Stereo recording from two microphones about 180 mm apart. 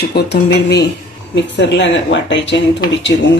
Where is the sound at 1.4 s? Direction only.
80° left.